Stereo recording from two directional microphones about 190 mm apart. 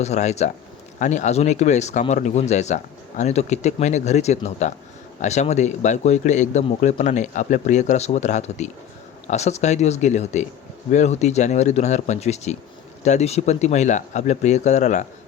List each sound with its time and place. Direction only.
0.0 s speech: 35° left (ahead or behind)